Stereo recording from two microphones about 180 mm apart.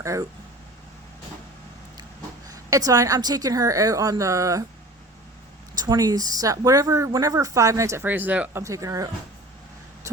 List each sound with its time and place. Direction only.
0.0 s speech: 15° right (ahead or behind)
2.5 s a woman's voice: 20° right (ahead or behind)
5.7 s speech: 20° right (ahead or behind)